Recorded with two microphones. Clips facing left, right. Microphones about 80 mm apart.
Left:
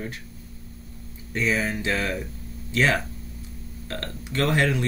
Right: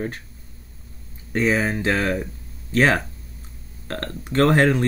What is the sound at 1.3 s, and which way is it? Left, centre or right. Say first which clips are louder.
Speech: right 4 dB; right.